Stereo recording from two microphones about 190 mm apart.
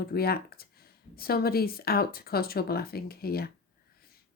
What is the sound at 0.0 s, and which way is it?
A woman's voice, 55° left (ahead or behind).